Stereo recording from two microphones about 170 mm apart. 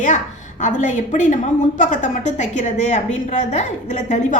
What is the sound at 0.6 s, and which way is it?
A woman's voice, 45° left (ahead or behind).